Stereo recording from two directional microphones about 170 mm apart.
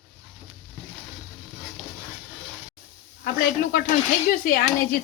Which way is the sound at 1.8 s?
10° right (ahead or behind).